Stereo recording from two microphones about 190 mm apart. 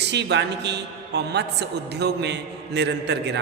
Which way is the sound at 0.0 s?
65° right (ahead or behind).